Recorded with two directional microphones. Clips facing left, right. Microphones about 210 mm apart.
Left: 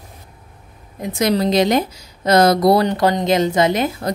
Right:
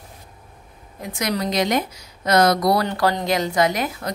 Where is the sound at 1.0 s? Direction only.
25° left (ahead or behind).